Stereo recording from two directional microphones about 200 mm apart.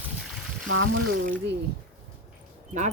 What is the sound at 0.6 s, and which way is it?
Speech, 90° right.